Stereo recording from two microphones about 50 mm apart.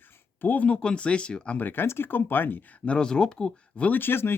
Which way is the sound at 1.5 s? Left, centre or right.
Left.